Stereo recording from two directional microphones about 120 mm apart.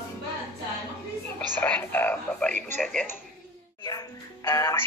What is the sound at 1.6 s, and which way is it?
Speech, 15° left (ahead or behind).